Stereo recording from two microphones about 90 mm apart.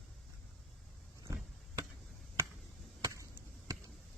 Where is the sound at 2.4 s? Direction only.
30° right (ahead or behind).